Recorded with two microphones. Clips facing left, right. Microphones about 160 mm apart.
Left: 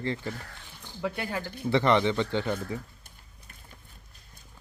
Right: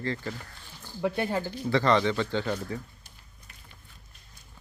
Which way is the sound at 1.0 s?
25° right (ahead or behind).